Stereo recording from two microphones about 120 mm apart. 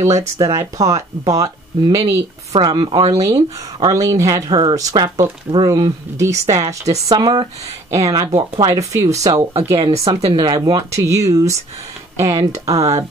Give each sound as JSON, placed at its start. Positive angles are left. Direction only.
{"t": 0.4, "sound": "speech", "side_deg": -30}
{"t": 2.6, "sound": "speech", "side_deg": -40}
{"t": 3.2, "sound": "speech", "side_deg": -30}
{"t": 9.4, "sound": "speech", "side_deg": -55}
{"t": 10.3, "sound": "speech", "side_deg": -40}